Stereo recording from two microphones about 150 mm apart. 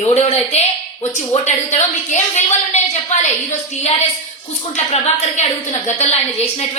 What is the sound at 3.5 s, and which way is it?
A woman's voice, 45° left (ahead or behind).